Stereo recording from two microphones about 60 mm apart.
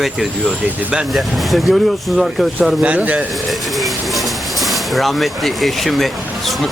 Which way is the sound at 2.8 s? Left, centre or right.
Right.